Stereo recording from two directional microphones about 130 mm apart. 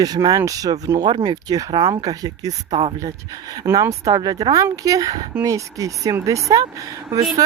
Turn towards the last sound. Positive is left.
turn(degrees=-25)  # may be behind; listen again after turning